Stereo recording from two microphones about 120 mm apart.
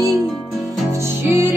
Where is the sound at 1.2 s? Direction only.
20° right (ahead or behind).